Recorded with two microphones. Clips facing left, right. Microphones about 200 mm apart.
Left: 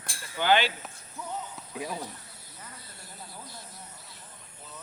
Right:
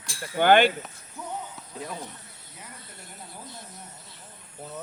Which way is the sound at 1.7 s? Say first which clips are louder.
Left 1 dB; 5° left (ahead or behind).